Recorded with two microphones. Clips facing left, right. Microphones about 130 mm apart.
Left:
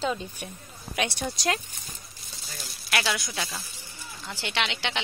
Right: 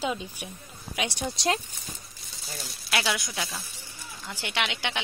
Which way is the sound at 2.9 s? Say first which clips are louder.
Even; 15° right (ahead or behind).